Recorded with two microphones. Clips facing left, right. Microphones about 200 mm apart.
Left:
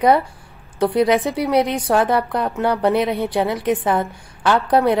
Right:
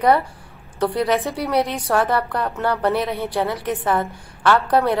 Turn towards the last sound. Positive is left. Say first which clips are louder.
# left 2 dB
turn(degrees=15)  # may be behind; listen again after turning